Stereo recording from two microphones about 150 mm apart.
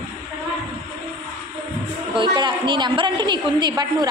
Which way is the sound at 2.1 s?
30° right (ahead or behind).